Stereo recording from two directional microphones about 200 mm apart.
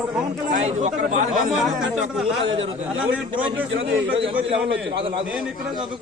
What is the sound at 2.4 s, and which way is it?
Speech, 30° right (ahead or behind).